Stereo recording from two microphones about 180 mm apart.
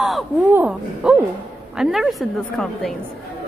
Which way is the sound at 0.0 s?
5° right (ahead or behind).